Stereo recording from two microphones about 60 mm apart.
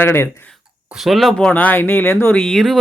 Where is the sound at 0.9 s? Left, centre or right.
Centre.